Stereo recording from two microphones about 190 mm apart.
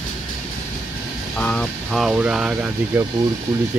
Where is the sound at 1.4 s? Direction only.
5° left (ahead or behind); by 3.1 s 10° right (ahead or behind).